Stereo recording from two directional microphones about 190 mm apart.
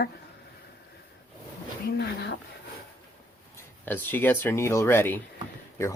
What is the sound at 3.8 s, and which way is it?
Speech, 10° left (ahead or behind).